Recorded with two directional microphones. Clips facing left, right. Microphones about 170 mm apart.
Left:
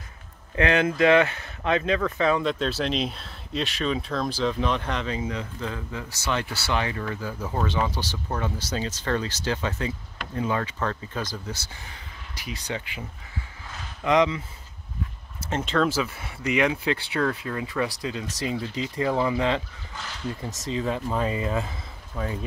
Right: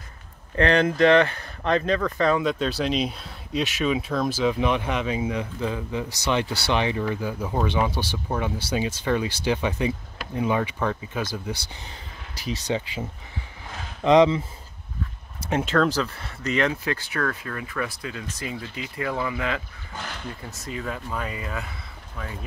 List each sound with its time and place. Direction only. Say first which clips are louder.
0.6 s speech: right 2 dB; 5° left (ahead or behind); by 11.6 s 10° right (ahead or behind)
12.4 s speech: right 6 dB; 30° right (ahead or behind)
14.0 s speech: right 5 dB; 30° right (ahead or behind)
15.4 s speech: right 4 dB; 10° right (ahead or behind)
15.7 s speech: even; 5° left (ahead or behind); by 19.6 s 25° left (ahead or behind)
20.7 s speech: left 5 dB; 25° left (ahead or behind)